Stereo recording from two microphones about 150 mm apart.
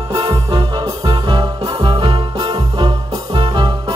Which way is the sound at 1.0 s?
25° right (ahead or behind).